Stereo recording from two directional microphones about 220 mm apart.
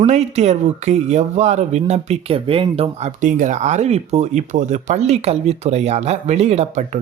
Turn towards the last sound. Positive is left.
turn(degrees=-30)  # may be behind; listen again after turning